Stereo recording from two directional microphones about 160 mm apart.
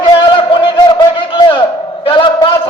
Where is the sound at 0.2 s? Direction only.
30° left (ahead or behind).